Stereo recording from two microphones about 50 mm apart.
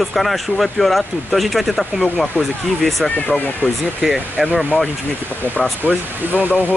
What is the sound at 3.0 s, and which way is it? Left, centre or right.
Speech, left.